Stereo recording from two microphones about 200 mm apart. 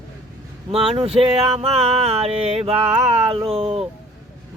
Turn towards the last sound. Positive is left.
turn(degrees=-30)  # may be behind; listen again after turning